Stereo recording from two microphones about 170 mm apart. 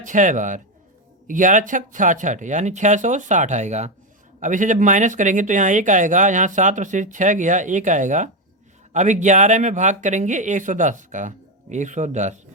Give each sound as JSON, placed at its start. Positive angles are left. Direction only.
{"t": 0.0, "sound": "speech", "side_deg": -50}